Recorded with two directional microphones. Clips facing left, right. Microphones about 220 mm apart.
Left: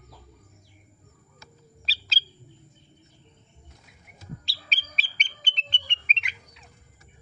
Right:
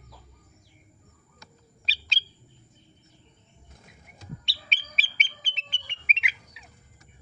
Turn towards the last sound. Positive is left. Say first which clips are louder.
# right 3 dB
turn(degrees=-5)  # may be behind; listen again after turning